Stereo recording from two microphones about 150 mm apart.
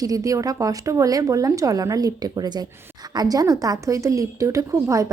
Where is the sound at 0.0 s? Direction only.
25° right (ahead or behind).